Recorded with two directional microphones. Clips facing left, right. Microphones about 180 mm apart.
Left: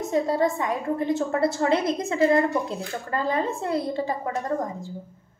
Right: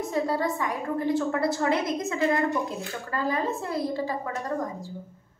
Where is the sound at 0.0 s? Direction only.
25° left (ahead or behind).